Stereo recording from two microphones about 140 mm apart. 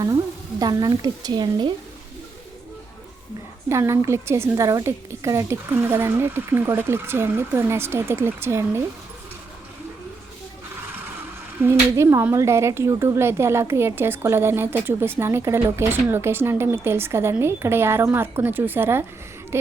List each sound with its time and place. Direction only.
0.6 s a woman's voice: 25° right (ahead or behind)
3.7 s speech: 20° right (ahead or behind)
11.6 s speech: 15° right (ahead or behind)